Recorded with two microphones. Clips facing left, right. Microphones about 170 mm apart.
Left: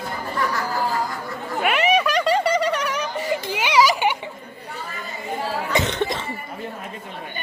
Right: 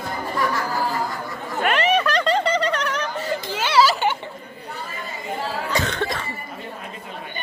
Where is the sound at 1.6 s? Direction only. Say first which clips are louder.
Even; 10° left (ahead or behind).